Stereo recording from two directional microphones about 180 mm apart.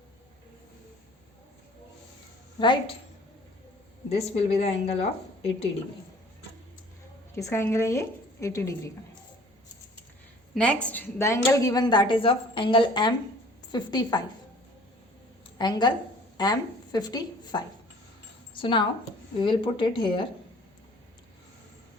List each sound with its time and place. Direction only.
2.6 s a woman's voice: 30° left (ahead or behind)
4.1 s speech: 35° left (ahead or behind)
7.3 s a woman's voice: 15° left (ahead or behind)
10.5 s a woman's voice: 5° left (ahead or behind); by 14.2 s 20° left (ahead or behind)
15.5 s a woman's voice: 25° left (ahead or behind)